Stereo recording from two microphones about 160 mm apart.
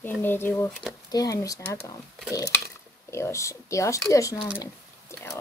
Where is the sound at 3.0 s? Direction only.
15° left (ahead or behind).